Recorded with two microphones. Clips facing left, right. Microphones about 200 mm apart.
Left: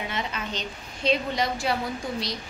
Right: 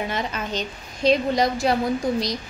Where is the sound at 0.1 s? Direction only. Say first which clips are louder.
Right 4 dB; 45° right (ahead or behind).